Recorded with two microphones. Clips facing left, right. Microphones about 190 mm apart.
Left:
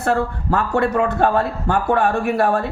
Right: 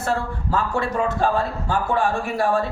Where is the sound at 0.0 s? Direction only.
60° left (ahead or behind).